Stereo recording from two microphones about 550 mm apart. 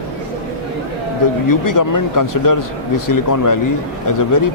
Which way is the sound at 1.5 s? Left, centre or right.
Left.